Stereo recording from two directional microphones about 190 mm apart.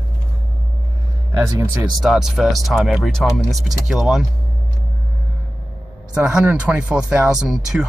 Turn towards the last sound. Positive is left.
turn(degrees=0)  # may be behind; listen again after turning